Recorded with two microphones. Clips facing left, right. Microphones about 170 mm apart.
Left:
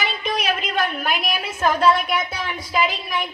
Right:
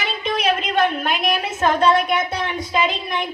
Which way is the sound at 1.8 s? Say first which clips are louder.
Right 1 dB; 5° left (ahead or behind).